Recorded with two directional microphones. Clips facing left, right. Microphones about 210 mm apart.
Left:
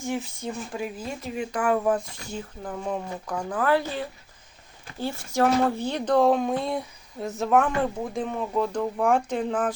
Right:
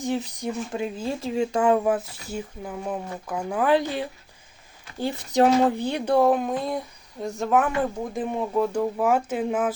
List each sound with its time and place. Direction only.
0.0 s speech: 20° right (ahead or behind)
1.8 s speech: 10° right (ahead or behind)
8.3 s speech: 10° right (ahead or behind)